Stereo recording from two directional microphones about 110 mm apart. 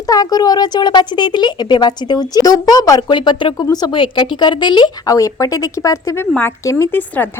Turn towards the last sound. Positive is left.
turn(degrees=15)  # may be behind; listen again after turning